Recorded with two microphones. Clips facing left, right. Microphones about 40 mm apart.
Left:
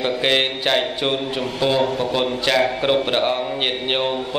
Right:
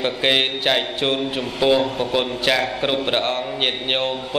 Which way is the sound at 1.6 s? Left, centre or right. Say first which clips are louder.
Right 1 dB; centre.